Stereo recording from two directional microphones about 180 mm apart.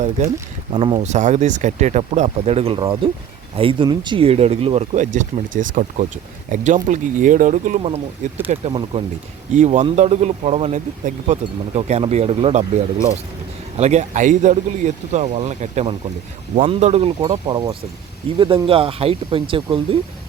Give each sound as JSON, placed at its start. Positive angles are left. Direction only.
{"t": 0.7, "sound": "speech", "side_deg": -25}
{"t": 1.0, "sound": "speech", "side_deg": -40}
{"t": 9.5, "sound": "speech", "side_deg": -40}
{"t": 13.7, "sound": "speech", "side_deg": -40}